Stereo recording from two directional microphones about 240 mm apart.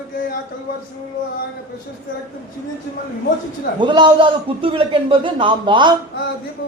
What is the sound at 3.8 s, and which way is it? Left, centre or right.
A man's voice, centre.